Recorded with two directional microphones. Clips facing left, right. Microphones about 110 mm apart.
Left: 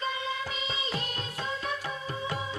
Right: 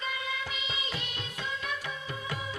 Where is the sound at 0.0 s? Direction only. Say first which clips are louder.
Left 3 dB; 30° left (ahead or behind).